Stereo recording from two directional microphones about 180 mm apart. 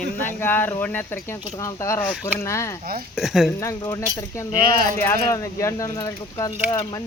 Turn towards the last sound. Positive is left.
turn(degrees=20)  # may be behind; listen again after turning